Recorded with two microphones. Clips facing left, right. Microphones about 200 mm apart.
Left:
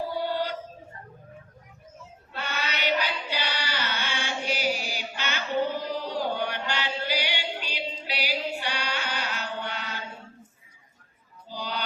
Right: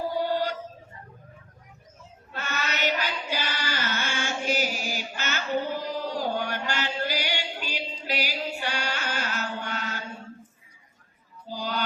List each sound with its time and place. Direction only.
0.2 s a sound: 45° right (ahead or behind)
2.3 s chant: 45° right (ahead or behind)
11.4 s music: 45° right (ahead or behind)